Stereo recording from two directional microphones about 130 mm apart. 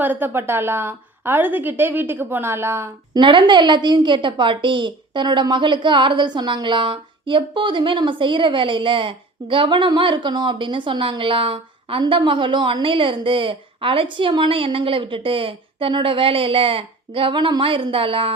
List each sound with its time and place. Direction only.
0.0 s a woman's voice: 15° right (ahead or behind)
3.2 s a woman's voice: 40° right (ahead or behind)